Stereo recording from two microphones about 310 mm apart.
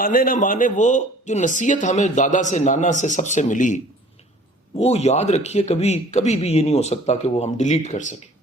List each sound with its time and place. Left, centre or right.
0.0 s speech: left
4.8 s speech: centre